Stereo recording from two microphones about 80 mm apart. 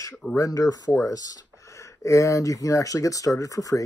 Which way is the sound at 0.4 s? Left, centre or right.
Left.